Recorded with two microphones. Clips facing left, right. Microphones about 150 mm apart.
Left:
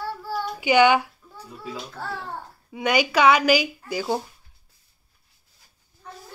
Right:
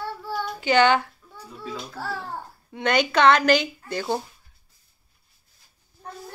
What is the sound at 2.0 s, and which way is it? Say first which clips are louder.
Speech: right 2 dB; 5° right (ahead or behind).